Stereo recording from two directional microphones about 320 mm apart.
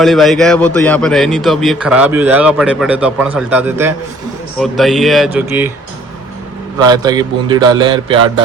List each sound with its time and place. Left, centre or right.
0.0 s a man's voice: centre
6.7 s a man's voice: centre